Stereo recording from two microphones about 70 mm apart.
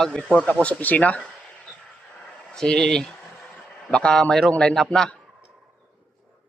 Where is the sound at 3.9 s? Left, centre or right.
Centre.